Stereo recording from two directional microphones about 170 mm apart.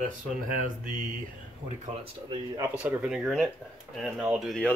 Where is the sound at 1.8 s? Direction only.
35° right (ahead or behind).